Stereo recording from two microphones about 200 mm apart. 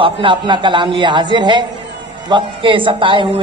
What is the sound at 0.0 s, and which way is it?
Speech, 25° right (ahead or behind).